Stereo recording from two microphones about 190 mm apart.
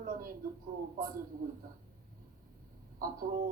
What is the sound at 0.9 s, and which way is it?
Speech, 50° right (ahead or behind).